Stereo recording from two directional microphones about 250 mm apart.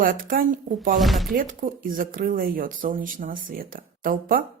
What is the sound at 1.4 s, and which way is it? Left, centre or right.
Speech, right.